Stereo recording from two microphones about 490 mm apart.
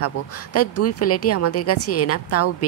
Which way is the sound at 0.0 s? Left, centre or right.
Left.